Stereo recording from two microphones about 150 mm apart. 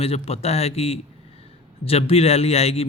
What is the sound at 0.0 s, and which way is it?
Speech, 40° left (ahead or behind).